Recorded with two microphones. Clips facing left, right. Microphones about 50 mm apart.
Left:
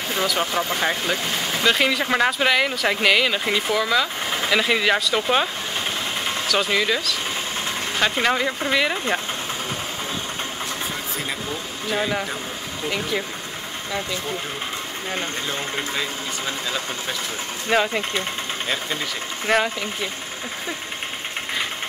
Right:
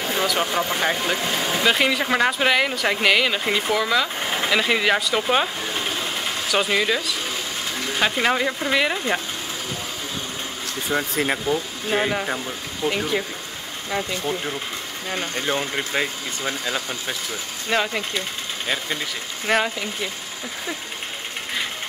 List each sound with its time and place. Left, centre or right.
0.1 s speech: centre
1.1 s speech: centre
1.6 s speech: centre
6.5 s speech: centre
11.0 s speech: right
12.8 s speech: centre
15.3 s speech: right
17.6 s speech: centre
19.4 s speech: centre